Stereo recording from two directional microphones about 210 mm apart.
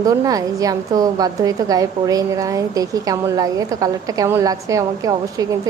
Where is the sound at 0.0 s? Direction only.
15° right (ahead or behind).